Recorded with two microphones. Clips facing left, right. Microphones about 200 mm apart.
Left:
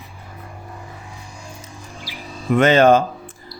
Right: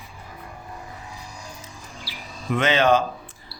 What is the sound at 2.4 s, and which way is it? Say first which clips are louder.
Speech: left 7 dB; 45° left (ahead or behind).